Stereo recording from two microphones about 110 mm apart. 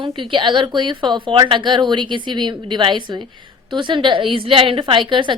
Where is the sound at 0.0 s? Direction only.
50° right (ahead or behind).